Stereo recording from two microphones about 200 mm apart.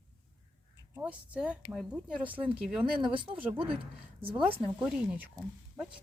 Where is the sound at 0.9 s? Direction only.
5° right (ahead or behind).